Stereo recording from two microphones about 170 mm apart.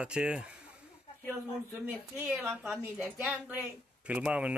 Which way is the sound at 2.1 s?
5° right (ahead or behind).